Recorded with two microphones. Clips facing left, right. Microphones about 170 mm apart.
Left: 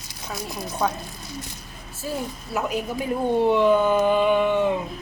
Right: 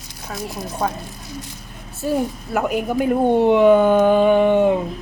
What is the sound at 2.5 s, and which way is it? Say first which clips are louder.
Speech: right 4 dB; 55° right (ahead or behind).